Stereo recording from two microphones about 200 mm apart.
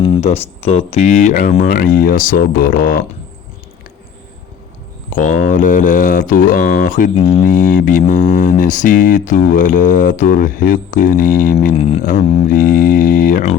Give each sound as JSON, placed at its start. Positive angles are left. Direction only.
{"t": 0.0, "sound": "speech", "side_deg": 25}
{"t": 5.1, "sound": "mantra", "side_deg": 40}
{"t": 12.0, "sound": "speech", "side_deg": 45}